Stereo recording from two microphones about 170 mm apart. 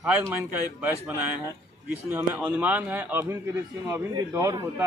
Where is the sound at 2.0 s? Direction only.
10° right (ahead or behind).